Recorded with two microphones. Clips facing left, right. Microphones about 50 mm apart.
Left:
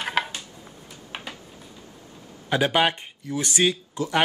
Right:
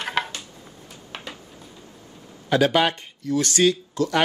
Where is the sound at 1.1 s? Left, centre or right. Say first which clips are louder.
Even; centre.